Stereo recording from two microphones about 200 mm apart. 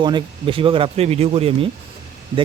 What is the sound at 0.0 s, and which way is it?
Speech, 25° right (ahead or behind).